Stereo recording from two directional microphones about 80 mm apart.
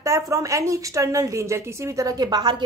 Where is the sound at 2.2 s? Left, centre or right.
Right.